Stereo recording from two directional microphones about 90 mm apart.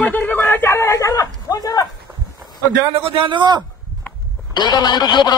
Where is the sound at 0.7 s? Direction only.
35° left (ahead or behind).